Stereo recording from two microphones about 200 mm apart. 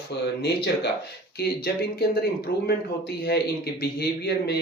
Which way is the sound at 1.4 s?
50° left (ahead or behind).